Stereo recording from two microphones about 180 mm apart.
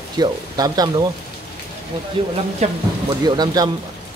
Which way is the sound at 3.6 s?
20° right (ahead or behind).